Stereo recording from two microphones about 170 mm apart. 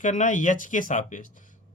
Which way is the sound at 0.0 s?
50° left (ahead or behind).